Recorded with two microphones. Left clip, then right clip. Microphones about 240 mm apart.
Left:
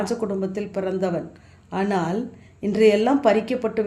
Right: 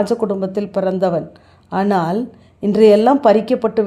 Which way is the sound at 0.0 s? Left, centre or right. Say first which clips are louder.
Right 7 dB; right.